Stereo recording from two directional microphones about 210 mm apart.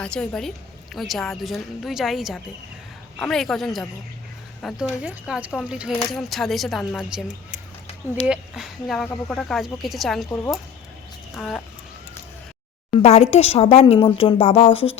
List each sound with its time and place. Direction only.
0.0 s speech: 5° left (ahead or behind)
8.3 s speech: centre (ahead or behind)
11.3 s speech: centre (ahead or behind)
12.9 s speech: 30° left (ahead or behind)